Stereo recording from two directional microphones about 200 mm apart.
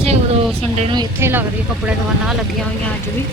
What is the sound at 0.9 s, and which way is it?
Speech, 10° right (ahead or behind).